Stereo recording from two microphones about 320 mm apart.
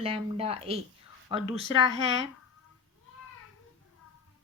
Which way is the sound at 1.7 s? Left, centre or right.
Left.